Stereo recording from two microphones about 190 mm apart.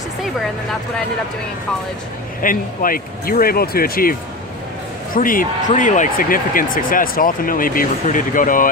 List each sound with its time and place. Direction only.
2.4 s speech: 45° left (ahead or behind)